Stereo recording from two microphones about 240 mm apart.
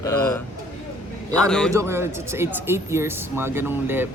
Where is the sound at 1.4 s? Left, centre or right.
Centre.